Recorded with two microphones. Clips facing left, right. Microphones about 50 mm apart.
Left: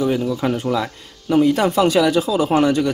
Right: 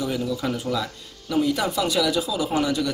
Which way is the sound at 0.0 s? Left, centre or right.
Left.